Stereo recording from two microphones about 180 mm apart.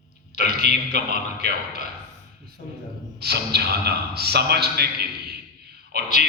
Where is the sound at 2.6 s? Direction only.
45° left (ahead or behind).